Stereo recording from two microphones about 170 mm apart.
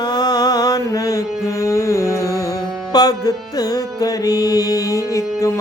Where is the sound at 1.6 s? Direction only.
15° left (ahead or behind).